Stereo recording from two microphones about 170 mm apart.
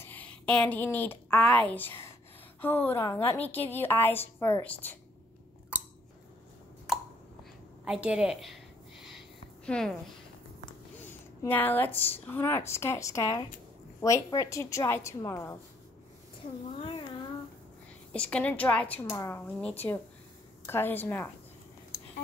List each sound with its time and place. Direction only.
0.0 s a woman's voice: 10° left (ahead or behind)
6.9 s a sound: 5° right (ahead or behind)
7.8 s a woman's voice: 5° right (ahead or behind)
9.7 s a woman's voice: 5° left (ahead or behind)
11.0 s a woman's voice: 10° left (ahead or behind)
18.1 s a woman's voice: 5° left (ahead or behind)